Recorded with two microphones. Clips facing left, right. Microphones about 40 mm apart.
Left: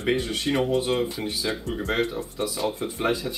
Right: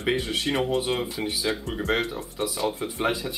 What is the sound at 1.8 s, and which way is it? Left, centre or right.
Speech, centre.